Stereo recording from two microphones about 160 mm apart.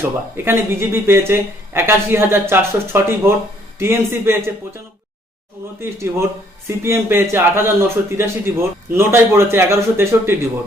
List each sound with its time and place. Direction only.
0.0 s speech: 15° right (ahead or behind)
5.8 s speech: 15° right (ahead or behind)